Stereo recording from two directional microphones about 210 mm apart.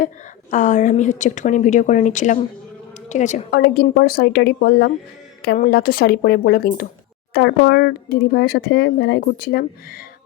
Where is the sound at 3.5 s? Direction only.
50° left (ahead or behind).